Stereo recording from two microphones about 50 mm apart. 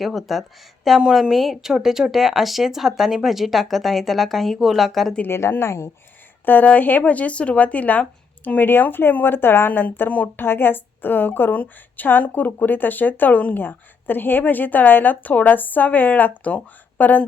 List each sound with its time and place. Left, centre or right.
0.0 s speech: centre
5.3 s speech: left
6.4 s speech: left
8.6 s speech: left
10.1 s a woman's voice: left
10.4 s a woman's voice: left